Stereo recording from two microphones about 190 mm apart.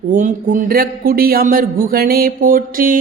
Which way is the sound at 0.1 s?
45° right (ahead or behind).